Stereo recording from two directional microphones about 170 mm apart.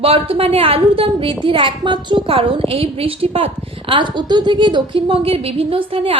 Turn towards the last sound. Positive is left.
turn(degrees=-30)  # may be behind; listen again after turning